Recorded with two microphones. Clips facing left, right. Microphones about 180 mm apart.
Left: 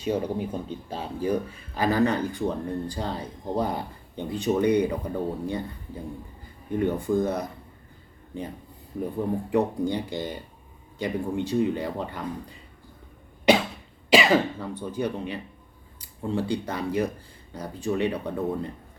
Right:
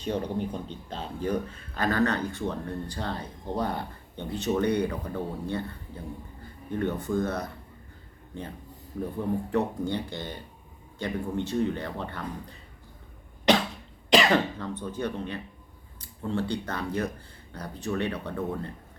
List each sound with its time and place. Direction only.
0.0 s speech: 10° left (ahead or behind)
6.7 s speech: 10° left (ahead or behind)
9.5 s speech: 15° left (ahead or behind)
13.5 s cough: 10° left (ahead or behind)
14.1 s speech: 5° left (ahead or behind)